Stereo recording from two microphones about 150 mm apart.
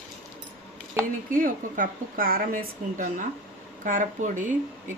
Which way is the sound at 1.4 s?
65° right (ahead or behind).